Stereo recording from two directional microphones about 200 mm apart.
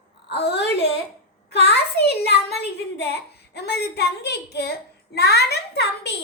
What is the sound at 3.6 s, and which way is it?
A child's voice, 55° left (ahead or behind).